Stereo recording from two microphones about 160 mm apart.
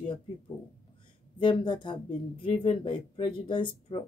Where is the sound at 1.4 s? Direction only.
30° left (ahead or behind).